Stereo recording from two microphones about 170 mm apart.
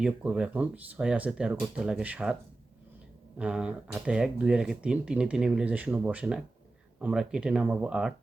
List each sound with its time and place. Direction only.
0.0 s speech: 5° right (ahead or behind)
3.3 s speech: 5° right (ahead or behind)